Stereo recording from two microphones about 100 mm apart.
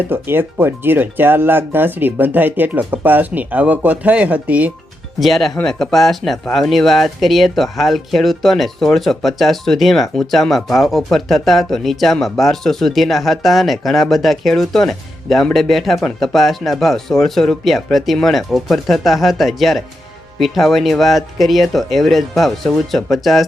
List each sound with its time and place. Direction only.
0.0 s speech: 20° right (ahead or behind)
5.2 s speech: centre (ahead or behind)